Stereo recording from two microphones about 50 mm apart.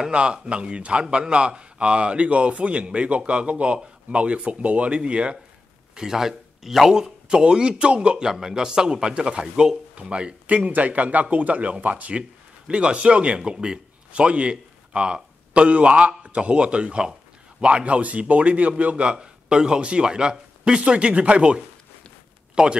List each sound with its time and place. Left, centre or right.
0.0 s speech: centre
5.9 s speech: centre
10.4 s speech: right